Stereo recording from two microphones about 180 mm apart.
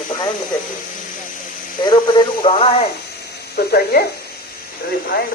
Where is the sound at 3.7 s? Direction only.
55° left (ahead or behind).